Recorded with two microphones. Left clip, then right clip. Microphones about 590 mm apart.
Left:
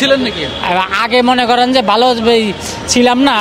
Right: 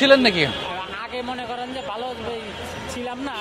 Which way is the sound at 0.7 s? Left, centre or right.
Left.